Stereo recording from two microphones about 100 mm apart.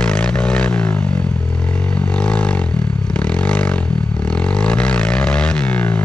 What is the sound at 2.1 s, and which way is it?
Vehicle, 10° left (ahead or behind).